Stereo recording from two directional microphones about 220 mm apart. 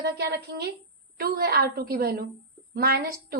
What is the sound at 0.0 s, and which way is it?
A woman's voice, 45° right (ahead or behind).